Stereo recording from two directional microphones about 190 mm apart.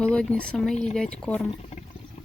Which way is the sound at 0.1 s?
5° left (ahead or behind).